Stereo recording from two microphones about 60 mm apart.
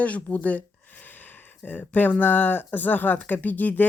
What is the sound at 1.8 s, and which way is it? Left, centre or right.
Speech, left.